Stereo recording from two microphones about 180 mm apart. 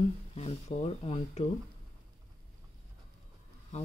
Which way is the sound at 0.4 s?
40° left (ahead or behind).